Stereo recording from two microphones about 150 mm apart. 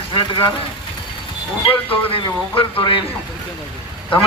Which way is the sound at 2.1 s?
35° left (ahead or behind).